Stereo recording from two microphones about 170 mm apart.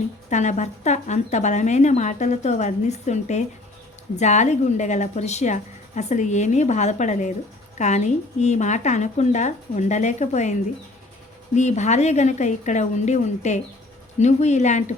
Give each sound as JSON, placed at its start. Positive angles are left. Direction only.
{"t": 0.3, "sound": "a woman's voice", "side_deg": 45}